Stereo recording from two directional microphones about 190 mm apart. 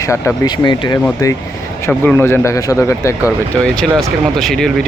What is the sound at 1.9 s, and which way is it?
A man's voice, 10° left (ahead or behind).